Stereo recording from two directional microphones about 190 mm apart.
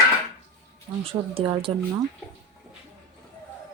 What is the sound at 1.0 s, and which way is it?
Speech, 30° right (ahead or behind).